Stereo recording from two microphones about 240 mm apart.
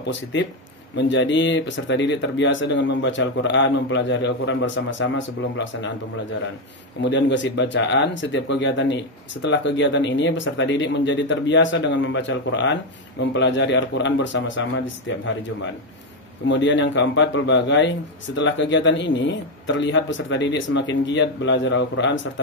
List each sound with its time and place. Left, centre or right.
0.0 s a man's voice: left
7.0 s a man's voice: left